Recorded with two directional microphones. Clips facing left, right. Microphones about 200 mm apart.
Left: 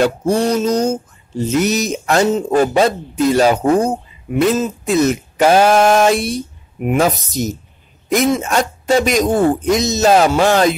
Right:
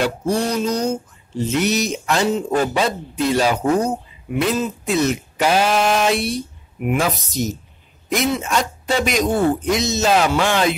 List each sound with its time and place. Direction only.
0.0 s speech: 45° left (ahead or behind)